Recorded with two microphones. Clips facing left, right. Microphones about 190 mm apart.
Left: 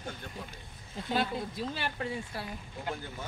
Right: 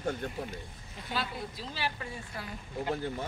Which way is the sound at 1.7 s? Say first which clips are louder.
Left 1 dB; 55° left (ahead or behind).